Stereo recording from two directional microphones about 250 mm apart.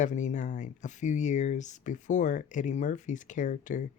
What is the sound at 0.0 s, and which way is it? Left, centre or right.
Speech, left.